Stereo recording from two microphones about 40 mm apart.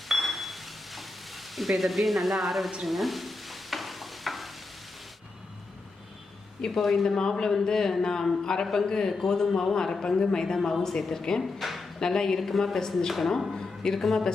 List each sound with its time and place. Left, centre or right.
0.1 s a sound: centre
1.5 s speech: centre
2.8 s stir: centre
6.7 s speech: centre
7.2 s a woman's voice: centre
11.6 s a sound: centre
11.9 s a woman's voice: centre
13.5 s a sound: centre
14.0 s speech: centre